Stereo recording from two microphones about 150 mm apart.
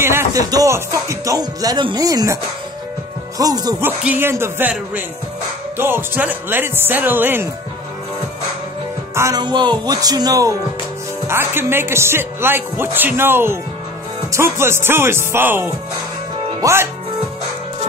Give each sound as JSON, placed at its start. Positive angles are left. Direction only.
{"t": 0.0, "sound": "music", "side_deg": -15}
{"t": 3.3, "sound": "speech", "side_deg": -25}
{"t": 3.8, "sound": "speech", "side_deg": -15}
{"t": 9.1, "sound": "music", "side_deg": -20}
{"t": 9.4, "sound": "speech", "side_deg": -30}